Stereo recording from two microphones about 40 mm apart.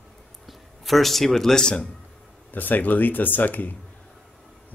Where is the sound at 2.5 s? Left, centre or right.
Left.